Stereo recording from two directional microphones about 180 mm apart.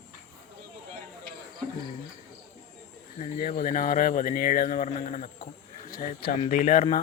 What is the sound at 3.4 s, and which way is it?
Speech, 50° left (ahead or behind).